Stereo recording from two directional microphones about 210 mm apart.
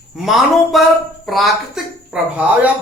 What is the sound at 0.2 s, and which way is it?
Speech, centre (ahead or behind).